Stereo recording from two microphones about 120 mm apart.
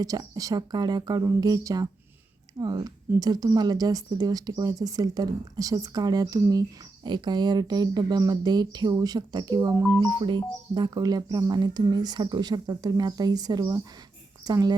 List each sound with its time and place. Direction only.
0.0 s speech: 30° right (ahead or behind)
9.7 s speech: 20° right (ahead or behind)
10.0 s speech: 35° right (ahead or behind)